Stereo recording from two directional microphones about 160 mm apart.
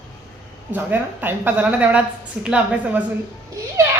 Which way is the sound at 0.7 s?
10° right (ahead or behind).